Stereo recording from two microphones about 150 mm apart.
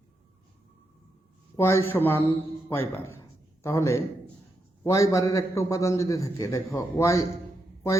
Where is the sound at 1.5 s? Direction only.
15° left (ahead or behind).